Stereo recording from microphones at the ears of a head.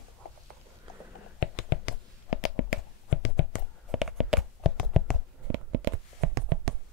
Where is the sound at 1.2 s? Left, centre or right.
Left.